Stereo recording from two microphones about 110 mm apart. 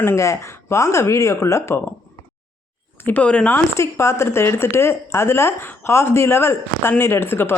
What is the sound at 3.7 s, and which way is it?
Speech, 25° left (ahead or behind).